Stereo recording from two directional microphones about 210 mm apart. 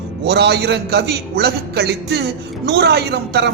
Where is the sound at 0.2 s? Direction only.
50° right (ahead or behind).